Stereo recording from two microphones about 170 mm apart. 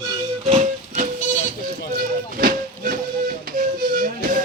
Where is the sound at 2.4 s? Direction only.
55° right (ahead or behind).